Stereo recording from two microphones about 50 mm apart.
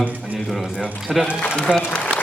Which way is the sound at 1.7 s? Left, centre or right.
Centre.